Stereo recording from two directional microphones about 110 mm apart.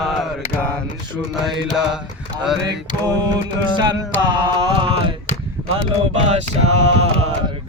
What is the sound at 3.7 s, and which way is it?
Music, 40° right (ahead or behind).